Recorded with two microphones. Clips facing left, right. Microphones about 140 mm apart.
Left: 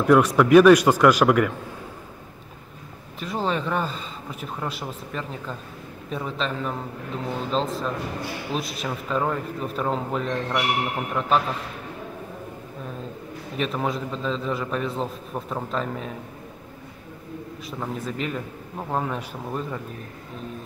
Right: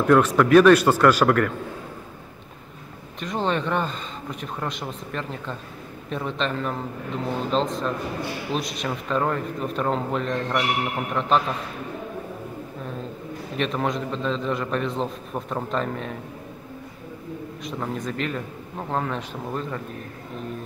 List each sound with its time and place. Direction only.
0.0 s a man's voice: 10° left (ahead or behind)
3.2 s a man's voice: 5° left (ahead or behind)
13.6 s a man's voice: 5° left (ahead or behind)
17.6 s a man's voice: 5° left (ahead or behind)